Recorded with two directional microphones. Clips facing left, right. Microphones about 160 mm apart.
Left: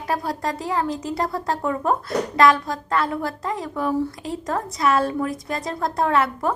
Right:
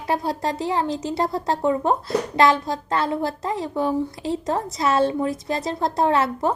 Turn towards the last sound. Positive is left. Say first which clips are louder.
# right 1 dB
turn(degrees=-30)  # may be behind; listen again after turning